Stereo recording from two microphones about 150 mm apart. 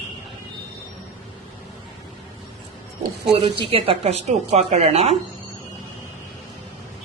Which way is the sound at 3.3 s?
35° right (ahead or behind).